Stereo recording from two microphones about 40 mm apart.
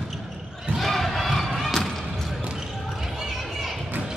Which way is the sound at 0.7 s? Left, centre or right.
Centre.